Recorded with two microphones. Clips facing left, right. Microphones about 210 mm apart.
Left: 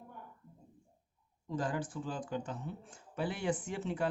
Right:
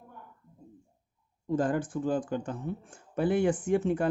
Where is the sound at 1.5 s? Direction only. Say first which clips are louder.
Right 8 dB; 50° right (ahead or behind).